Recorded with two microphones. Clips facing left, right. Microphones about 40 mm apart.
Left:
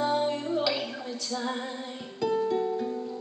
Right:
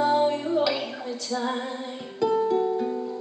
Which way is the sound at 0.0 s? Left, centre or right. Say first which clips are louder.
Right 5 dB; centre.